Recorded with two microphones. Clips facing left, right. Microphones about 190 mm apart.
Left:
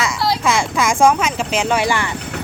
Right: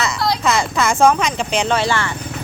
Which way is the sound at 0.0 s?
5° left (ahead or behind).